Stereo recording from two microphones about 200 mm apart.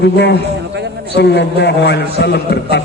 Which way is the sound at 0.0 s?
60° left (ahead or behind).